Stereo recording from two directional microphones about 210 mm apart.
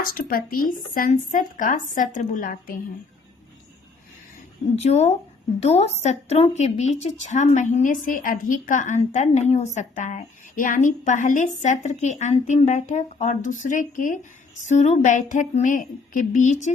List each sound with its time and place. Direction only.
0.0 s a woman's voice: 45° left (ahead or behind)
4.8 s a woman's voice: 30° left (ahead or behind)